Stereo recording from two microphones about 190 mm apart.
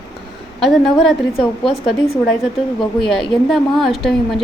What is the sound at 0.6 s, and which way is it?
Speech, centre (ahead or behind).